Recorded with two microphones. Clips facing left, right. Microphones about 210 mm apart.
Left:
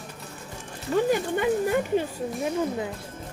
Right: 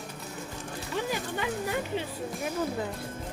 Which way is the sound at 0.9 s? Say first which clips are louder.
Left 9 dB; 45° left (ahead or behind).